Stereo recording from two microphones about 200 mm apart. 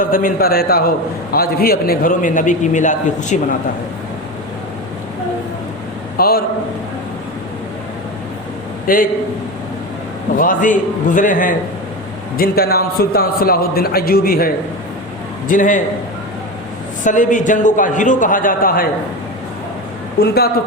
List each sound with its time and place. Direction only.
0.0 s a man's voice: 45° left (ahead or behind)
6.1 s a man's voice: 50° left (ahead or behind)
8.9 s a man's voice: 45° left (ahead or behind)
10.3 s a man's voice: 40° left (ahead or behind)
17.0 s a man's voice: 40° left (ahead or behind)
20.1 s a man's voice: 50° left (ahead or behind)